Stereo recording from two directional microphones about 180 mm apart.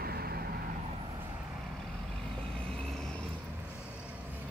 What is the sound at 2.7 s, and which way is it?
Vehicle, 5° left (ahead or behind).